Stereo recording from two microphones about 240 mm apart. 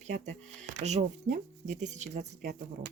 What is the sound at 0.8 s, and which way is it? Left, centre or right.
Speech, right.